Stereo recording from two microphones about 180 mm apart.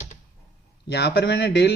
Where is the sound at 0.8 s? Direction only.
70° left (ahead or behind).